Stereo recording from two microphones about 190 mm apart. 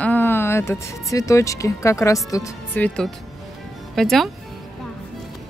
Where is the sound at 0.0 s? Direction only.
10° left (ahead or behind).